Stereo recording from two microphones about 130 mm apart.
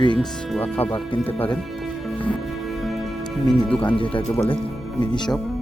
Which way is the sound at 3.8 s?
40° left (ahead or behind).